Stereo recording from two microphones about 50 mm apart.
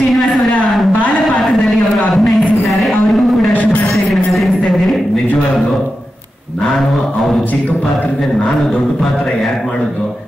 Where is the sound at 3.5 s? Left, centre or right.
Left.